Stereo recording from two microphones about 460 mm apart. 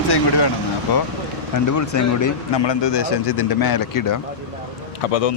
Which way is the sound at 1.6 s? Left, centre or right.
Left.